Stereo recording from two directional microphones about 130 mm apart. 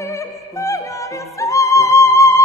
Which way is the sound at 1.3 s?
25° left (ahead or behind).